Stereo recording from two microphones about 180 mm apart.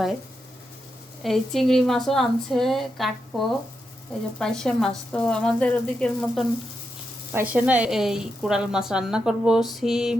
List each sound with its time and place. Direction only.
1.2 s a woman's voice: centre (ahead or behind)
7.3 s a woman's voice: 10° right (ahead or behind)